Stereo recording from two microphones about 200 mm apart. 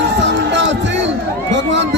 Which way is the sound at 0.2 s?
65° right (ahead or behind).